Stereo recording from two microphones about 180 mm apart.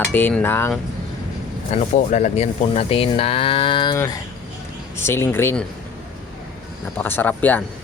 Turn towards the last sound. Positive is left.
turn(degrees=10)  # may be behind; listen again after turning